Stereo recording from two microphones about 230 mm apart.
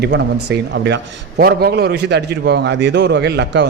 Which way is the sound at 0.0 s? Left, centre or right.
Right.